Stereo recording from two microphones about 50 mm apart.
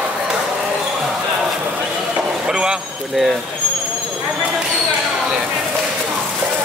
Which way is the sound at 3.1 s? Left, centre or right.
Centre.